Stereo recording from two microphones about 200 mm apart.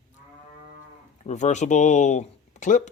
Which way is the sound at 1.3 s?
35° left (ahead or behind).